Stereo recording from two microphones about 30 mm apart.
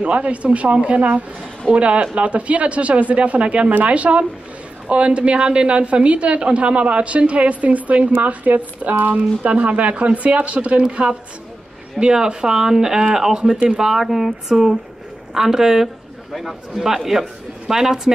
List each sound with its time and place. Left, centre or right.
0.0 s a woman's voice: right
7.1 s speech: right
10.8 s a woman's voice: right; by 14.0 s centre
14.0 s a sound: centre
14.5 s a man's voice: right